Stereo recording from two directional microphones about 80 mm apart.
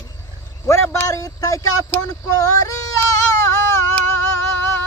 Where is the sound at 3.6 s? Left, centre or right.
Left.